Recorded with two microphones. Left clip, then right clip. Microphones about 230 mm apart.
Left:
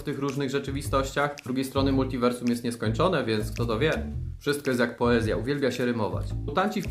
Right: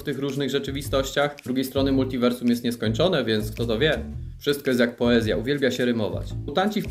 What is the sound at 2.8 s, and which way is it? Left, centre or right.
Speech, centre.